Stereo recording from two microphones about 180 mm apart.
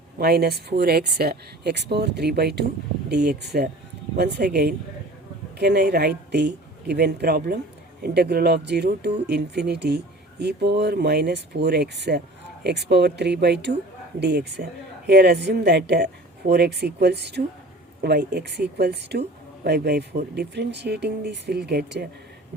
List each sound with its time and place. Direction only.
0.2 s speech: 60° right (ahead or behind)